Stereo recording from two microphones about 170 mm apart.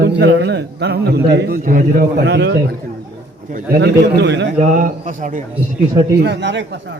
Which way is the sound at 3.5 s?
70° right (ahead or behind).